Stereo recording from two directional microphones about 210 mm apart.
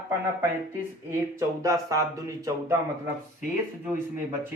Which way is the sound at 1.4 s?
15° right (ahead or behind).